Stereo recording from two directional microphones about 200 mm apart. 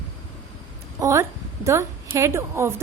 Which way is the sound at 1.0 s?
15° right (ahead or behind).